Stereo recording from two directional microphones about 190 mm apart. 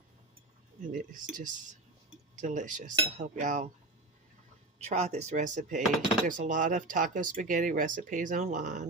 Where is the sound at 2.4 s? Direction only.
40° right (ahead or behind).